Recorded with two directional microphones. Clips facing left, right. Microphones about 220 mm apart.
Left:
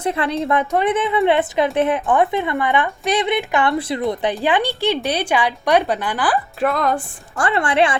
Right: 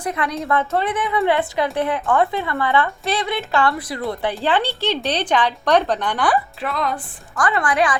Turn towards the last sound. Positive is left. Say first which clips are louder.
# left 2 dB
turn(degrees=25)  # may be behind; listen again after turning